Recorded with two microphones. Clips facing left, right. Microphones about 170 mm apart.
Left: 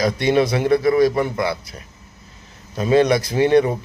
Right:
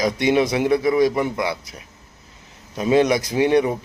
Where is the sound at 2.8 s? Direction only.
15° right (ahead or behind).